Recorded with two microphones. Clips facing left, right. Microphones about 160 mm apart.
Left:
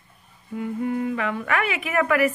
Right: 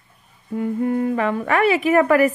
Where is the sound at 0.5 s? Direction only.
45° right (ahead or behind).